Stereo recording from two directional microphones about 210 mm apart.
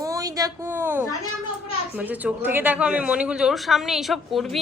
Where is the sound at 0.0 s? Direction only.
15° right (ahead or behind).